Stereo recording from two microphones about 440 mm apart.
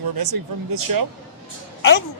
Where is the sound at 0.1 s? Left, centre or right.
Right.